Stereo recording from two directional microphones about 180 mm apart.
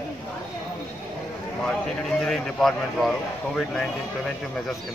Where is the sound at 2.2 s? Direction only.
5° left (ahead or behind).